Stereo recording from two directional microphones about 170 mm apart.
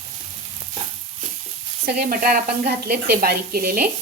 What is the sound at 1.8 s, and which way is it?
Speech, 55° right (ahead or behind).